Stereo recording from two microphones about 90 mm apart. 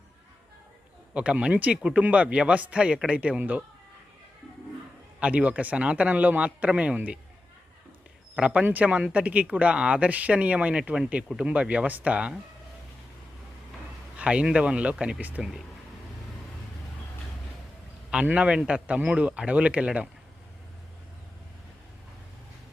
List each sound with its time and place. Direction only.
1.1 s speech: 10° right (ahead or behind)
5.2 s speech: 15° right (ahead or behind)
8.4 s speech: 15° right (ahead or behind)
14.2 s speech: 10° right (ahead or behind)
15.2 s speech: 15° right (ahead or behind)
18.1 s speech: 15° right (ahead or behind)